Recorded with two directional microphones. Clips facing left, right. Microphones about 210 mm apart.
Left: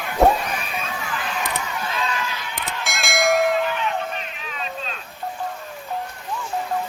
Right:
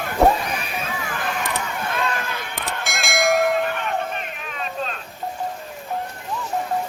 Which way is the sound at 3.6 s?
50° right (ahead or behind).